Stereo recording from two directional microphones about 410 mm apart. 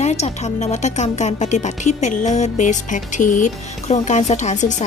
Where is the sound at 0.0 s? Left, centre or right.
Centre.